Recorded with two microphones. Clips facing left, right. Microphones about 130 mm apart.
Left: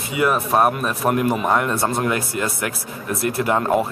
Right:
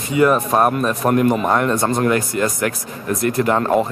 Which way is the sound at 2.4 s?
40° right (ahead or behind).